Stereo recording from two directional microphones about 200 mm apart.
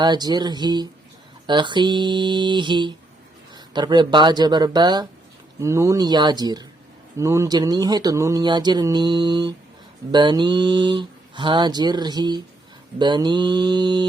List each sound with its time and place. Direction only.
0.0 s speech: 20° right (ahead or behind)